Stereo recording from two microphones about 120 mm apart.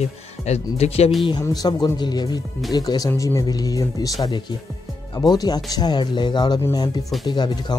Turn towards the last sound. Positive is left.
turn(degrees=40)  # may be behind; listen again after turning